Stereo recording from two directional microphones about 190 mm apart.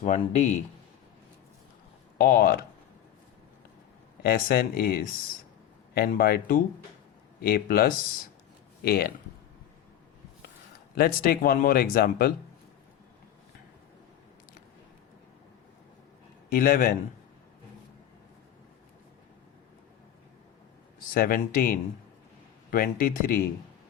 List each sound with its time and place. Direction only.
0.0 s speech: 40° left (ahead or behind)
2.1 s speech: 50° left (ahead or behind)
4.2 s speech: 50° left (ahead or behind)
10.9 s speech: 50° left (ahead or behind)
16.5 s speech: 50° left (ahead or behind)
21.1 s speech: 50° left (ahead or behind)